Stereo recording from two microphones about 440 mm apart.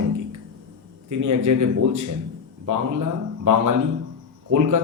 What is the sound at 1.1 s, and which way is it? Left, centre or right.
A man's voice, right.